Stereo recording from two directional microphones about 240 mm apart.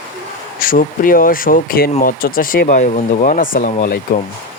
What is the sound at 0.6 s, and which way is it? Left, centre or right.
Speech, left.